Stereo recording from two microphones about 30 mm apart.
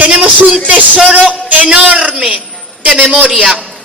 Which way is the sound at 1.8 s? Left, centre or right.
Right.